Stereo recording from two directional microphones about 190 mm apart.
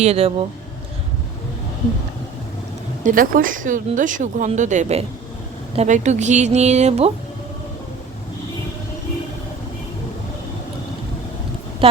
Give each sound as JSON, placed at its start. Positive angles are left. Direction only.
{"t": 0.0, "sound": "a woman's voice", "side_deg": -35}
{"t": 3.0, "sound": "a woman's voice", "side_deg": -45}
{"t": 11.8, "sound": "speech", "side_deg": -30}